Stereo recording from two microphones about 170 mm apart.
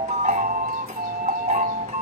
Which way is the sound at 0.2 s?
50° right (ahead or behind).